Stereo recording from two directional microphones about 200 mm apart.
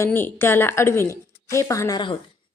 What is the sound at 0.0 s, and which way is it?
A woman's voice, 10° left (ahead or behind).